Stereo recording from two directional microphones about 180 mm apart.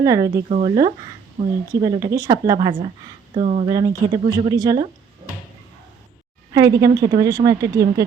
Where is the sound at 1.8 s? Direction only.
20° right (ahead or behind).